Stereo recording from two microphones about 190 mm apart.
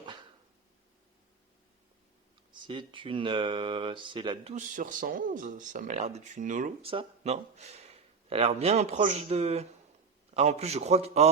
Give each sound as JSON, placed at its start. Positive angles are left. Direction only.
{"t": 0.0, "sound": "dog", "side_deg": -25}
{"t": 2.5, "sound": "speech", "side_deg": -25}
{"t": 4.5, "sound": "speech", "side_deg": -45}
{"t": 6.8, "sound": "a man's voice", "side_deg": -30}